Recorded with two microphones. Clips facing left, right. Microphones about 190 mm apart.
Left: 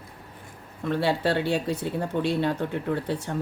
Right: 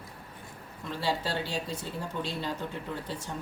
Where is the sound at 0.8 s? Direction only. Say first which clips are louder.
Left 8 dB; 60° left (ahead or behind).